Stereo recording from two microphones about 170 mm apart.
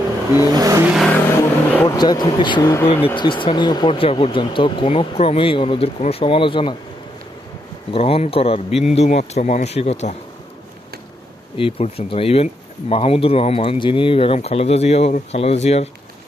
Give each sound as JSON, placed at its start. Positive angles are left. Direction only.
{"t": 0.5, "sound": "vehicle", "side_deg": -20}
{"t": 0.9, "sound": "vehicle", "side_deg": 0}
{"t": 1.4, "sound": "speech", "side_deg": 20}
{"t": 7.9, "sound": "speech", "side_deg": 35}
{"t": 8.7, "sound": "speech", "side_deg": 0}
{"t": 9.0, "sound": "speech", "side_deg": 40}
{"t": 11.5, "sound": "speech", "side_deg": 35}